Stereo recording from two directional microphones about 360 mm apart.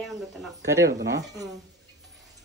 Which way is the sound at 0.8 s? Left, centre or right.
Right.